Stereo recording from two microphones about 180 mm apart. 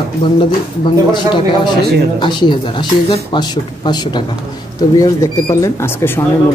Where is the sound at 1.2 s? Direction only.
25° left (ahead or behind).